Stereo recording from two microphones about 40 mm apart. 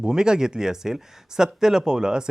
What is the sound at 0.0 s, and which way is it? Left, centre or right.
Speech, centre.